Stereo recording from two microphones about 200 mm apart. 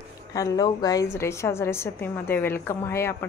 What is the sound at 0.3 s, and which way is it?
A woman's voice, 20° left (ahead or behind).